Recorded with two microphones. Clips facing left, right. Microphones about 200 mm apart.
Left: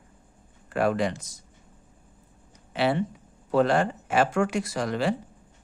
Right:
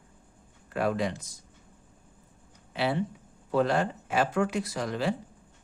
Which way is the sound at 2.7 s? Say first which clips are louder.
Left 4 dB; 75° left (ahead or behind).